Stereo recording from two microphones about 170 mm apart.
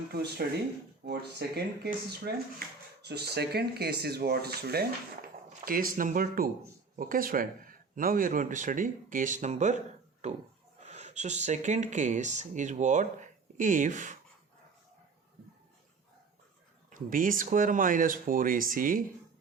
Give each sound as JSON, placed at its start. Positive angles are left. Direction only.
{"t": 0.1, "sound": "speech", "side_deg": -70}
{"t": 16.9, "sound": "speech", "side_deg": -55}